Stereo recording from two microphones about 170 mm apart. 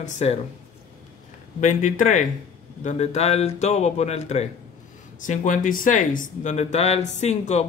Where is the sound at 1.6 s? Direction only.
45° left (ahead or behind).